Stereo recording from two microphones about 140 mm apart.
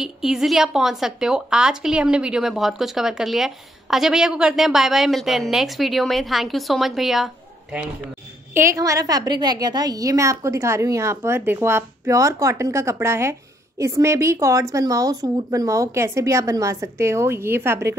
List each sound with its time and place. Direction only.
0.0 s a woman's voice: 5° right (ahead or behind)
8.5 s a woman's voice: 20° right (ahead or behind)